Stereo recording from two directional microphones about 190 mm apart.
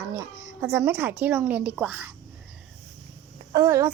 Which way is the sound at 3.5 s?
20° right (ahead or behind).